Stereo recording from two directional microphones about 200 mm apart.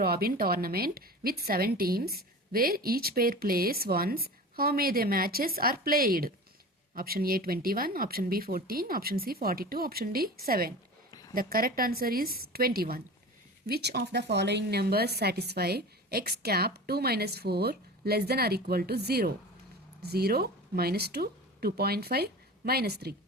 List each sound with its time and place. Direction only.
0.0 s a woman's voice: 50° right (ahead or behind)
11.1 s a sound: 15° left (ahead or behind)
11.3 s a woman's voice: 45° right (ahead or behind)